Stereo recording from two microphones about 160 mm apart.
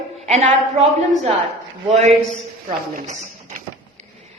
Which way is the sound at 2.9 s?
50° right (ahead or behind).